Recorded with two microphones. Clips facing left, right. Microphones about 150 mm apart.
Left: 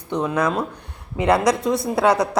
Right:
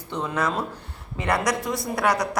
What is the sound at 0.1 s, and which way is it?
Speech, 15° left (ahead or behind).